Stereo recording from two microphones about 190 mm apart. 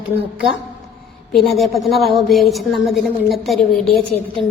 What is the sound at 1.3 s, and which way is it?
A woman's voice, centre (ahead or behind).